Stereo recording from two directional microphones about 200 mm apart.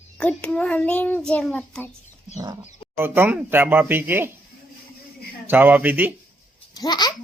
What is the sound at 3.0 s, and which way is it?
Speech, 10° right (ahead or behind).